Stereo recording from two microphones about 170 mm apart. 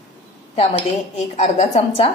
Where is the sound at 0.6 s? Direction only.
40° left (ahead or behind).